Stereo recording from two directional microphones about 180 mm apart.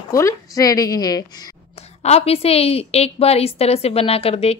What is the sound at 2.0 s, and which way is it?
A woman's voice, 35° left (ahead or behind).